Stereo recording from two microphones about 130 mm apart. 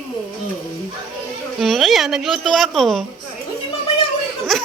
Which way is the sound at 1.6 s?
Centre (ahead or behind).